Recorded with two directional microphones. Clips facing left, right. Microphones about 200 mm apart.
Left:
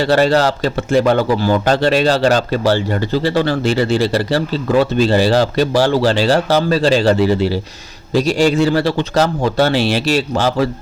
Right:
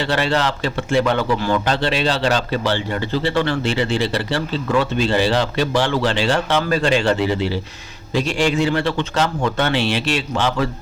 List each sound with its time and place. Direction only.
0.0 s speech: 40° left (ahead or behind)